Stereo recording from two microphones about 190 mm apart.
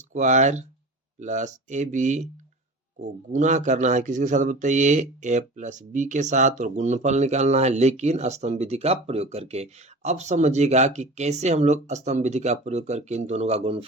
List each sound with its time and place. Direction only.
0.1 s speech: 40° right (ahead or behind)